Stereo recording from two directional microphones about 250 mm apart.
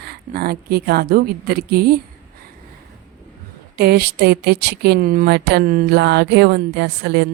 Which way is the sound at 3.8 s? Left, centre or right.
Right.